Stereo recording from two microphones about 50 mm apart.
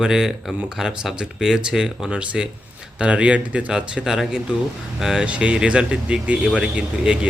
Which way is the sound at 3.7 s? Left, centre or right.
Centre.